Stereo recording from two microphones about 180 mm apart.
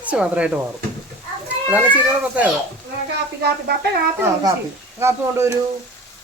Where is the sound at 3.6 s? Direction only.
60° right (ahead or behind).